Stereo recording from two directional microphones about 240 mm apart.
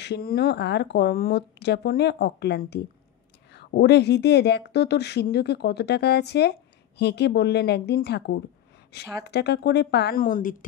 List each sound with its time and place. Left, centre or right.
0.0 s speech: left